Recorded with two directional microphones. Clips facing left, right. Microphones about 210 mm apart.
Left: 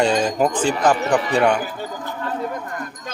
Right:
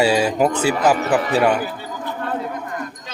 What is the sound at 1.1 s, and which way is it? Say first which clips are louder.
Speech: right 1 dB; 5° right (ahead or behind).